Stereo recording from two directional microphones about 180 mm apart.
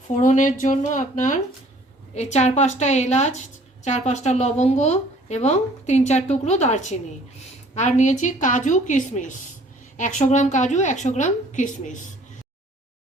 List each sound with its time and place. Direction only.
0.2 s a woman's voice: 45° left (ahead or behind)